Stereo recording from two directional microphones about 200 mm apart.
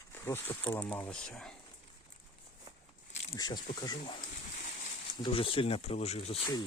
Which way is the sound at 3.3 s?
20° left (ahead or behind).